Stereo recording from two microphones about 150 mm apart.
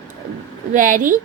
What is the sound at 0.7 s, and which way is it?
Speech, 60° right (ahead or behind).